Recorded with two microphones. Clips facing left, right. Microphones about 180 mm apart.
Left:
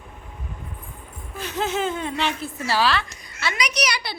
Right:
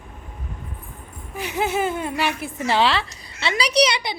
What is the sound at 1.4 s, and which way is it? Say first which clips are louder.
A woman's voice: right 2 dB; 15° right (ahead or behind).